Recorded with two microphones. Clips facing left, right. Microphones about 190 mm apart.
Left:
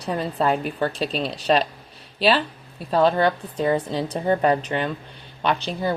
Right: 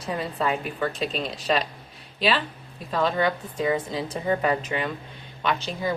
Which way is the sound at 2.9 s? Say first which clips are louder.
Left 5 dB; 30° left (ahead or behind).